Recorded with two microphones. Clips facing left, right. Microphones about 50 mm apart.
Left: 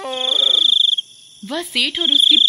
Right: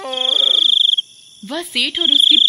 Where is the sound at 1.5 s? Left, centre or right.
Centre.